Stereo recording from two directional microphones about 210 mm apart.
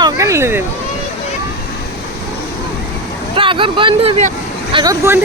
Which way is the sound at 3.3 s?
25° right (ahead or behind).